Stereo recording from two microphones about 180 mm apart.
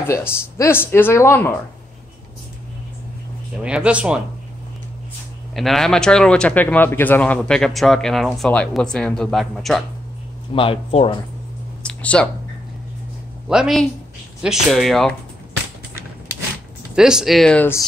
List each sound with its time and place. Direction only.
0.0 s speech: 15° left (ahead or behind)
3.6 s speech: 5° right (ahead or behind)
5.5 s speech: centre (ahead or behind)
10.5 s speech: 30° left (ahead or behind)
11.8 s a sound: 5° left (ahead or behind)
13.5 s speech: centre (ahead or behind)
16.9 s speech: 5° right (ahead or behind)